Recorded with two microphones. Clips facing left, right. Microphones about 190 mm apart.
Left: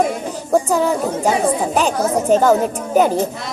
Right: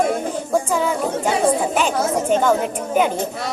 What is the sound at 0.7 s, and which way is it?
A child's voice, 40° left (ahead or behind).